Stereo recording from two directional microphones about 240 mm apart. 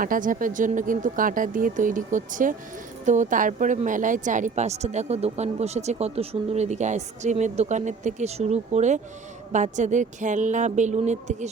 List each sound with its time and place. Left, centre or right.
0.0 s speech: right